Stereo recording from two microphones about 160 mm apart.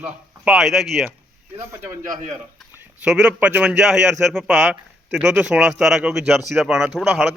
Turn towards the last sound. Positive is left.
turn(degrees=0)  # may be behind; listen again after turning